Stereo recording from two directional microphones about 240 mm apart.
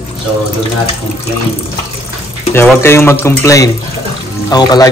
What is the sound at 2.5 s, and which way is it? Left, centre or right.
A man's voice, centre.